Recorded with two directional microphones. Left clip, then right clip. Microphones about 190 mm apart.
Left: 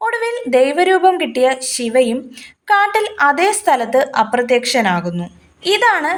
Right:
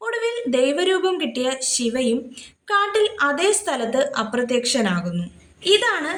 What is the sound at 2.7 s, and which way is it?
A woman's voice, 30° left (ahead or behind).